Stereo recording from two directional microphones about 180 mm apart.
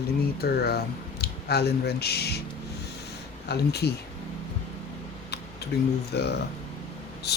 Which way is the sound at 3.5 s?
65° left (ahead or behind).